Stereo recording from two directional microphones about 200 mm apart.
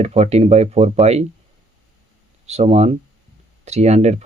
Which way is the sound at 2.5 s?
30° right (ahead or behind).